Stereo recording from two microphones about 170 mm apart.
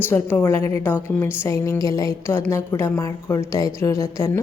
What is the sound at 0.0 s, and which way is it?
A woman's voice, 10° left (ahead or behind).